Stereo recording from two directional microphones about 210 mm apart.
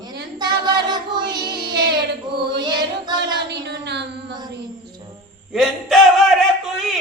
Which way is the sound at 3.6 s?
55° right (ahead or behind).